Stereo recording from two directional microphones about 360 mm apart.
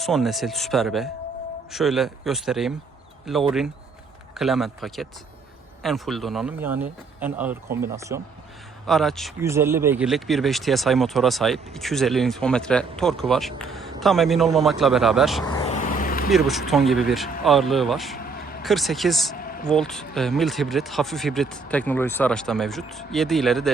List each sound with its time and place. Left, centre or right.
0.0 s speech: centre
15.4 s vehicle: centre
16.3 s speech: centre
18.2 s vehicle: left
18.6 s speech: centre
19.4 s a sound: left
19.6 s speech: centre